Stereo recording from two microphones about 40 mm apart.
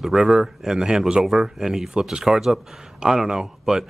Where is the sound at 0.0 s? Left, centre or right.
Centre.